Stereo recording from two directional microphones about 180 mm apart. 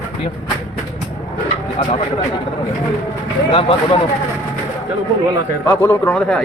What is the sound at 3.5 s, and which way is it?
Speech, 30° left (ahead or behind).